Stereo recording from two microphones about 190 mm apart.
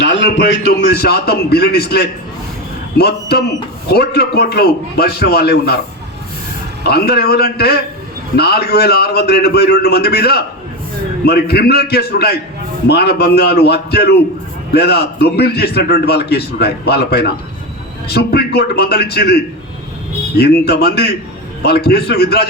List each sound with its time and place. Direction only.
0.0 s a man's voice: 70° left (ahead or behind)
6.8 s a man's voice: 55° left (ahead or behind)